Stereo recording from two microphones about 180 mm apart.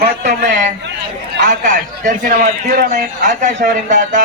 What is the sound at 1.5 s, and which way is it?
A man's voice, 45° right (ahead or behind).